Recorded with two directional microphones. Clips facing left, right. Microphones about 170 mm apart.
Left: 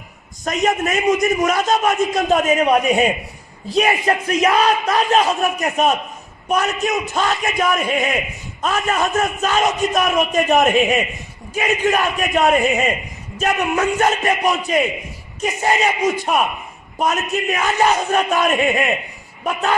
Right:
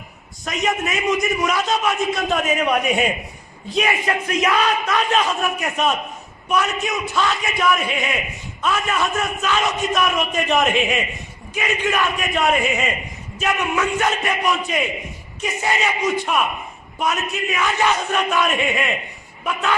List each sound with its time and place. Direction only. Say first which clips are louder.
0.5 s a man's voice: left 4 dB; 45° left (ahead or behind)